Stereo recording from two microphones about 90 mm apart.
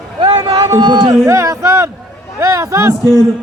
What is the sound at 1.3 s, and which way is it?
Music, 35° right (ahead or behind).